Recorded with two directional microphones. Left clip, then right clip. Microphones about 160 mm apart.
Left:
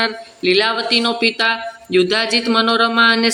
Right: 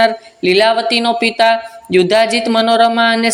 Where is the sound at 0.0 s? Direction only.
30° right (ahead or behind).